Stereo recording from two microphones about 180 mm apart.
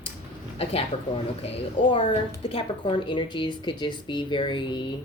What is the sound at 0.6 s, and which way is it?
Speech, 35° left (ahead or behind).